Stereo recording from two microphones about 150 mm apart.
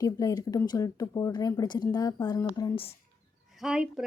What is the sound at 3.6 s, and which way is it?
Speech, 5° right (ahead or behind).